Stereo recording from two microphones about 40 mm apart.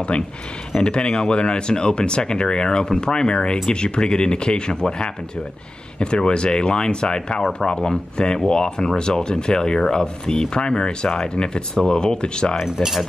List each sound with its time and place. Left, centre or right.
0.1 s speech: left
0.7 s speech: left
12.6 s cutlery: centre